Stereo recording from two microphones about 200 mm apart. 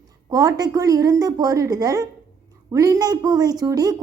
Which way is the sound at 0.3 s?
20° right (ahead or behind).